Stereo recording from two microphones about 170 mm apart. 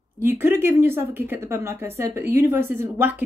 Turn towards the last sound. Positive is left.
turn(degrees=-10)  # may be behind; listen again after turning